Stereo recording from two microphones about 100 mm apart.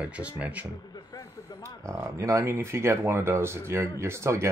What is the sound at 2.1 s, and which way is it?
Speech, 30° right (ahead or behind).